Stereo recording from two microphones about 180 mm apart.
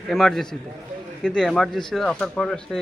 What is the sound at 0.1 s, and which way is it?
Speech, centre (ahead or behind).